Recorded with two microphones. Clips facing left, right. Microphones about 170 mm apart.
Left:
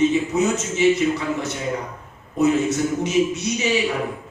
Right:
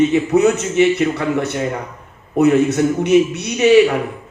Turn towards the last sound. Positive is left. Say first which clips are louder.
# right 10 dB
turn(degrees=-65)  # may be behind; listen again after turning